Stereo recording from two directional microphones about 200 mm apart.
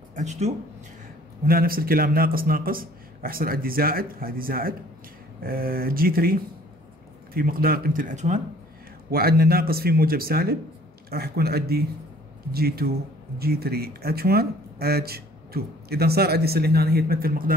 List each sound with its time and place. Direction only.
0.1 s speech: 35° right (ahead or behind)
1.4 s speech: 45° right (ahead or behind)
9.1 s speech: 50° right (ahead or behind)